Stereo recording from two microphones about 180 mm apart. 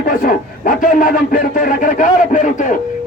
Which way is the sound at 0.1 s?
50° left (ahead or behind).